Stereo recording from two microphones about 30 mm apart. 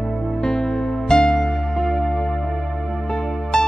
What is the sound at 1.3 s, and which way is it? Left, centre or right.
Music, centre.